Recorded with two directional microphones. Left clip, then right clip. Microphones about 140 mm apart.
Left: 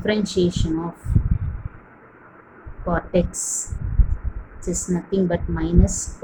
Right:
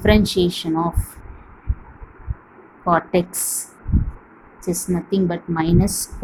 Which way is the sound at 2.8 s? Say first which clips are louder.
Right 4 dB; 50° right (ahead or behind).